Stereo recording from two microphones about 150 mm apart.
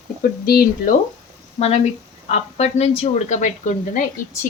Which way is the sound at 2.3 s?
45° left (ahead or behind).